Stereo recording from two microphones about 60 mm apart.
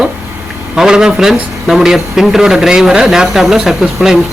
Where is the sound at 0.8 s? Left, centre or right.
Centre.